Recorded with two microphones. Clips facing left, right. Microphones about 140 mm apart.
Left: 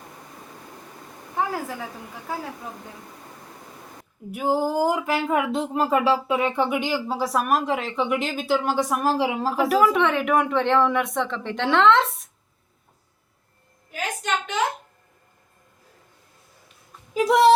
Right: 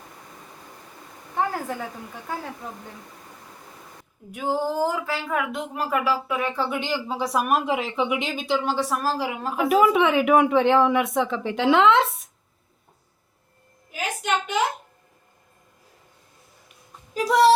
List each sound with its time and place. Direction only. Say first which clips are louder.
4.3 s speech: left 2 dB; 10° left (ahead or behind)
6.7 s speech: left 2 dB; 10° left (ahead or behind); by 9.5 s 25° left (ahead or behind)
9.7 s speech: right 3 dB; 5° right (ahead or behind)
13.9 s a sound: right 1 dB; 10° right (ahead or behind)
17.2 s speech: left 1 dB; 20° left (ahead or behind)